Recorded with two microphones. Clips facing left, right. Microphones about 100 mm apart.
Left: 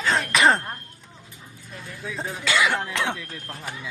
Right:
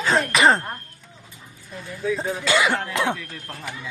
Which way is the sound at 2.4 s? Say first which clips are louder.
Right 1 dB; 25° right (ahead or behind).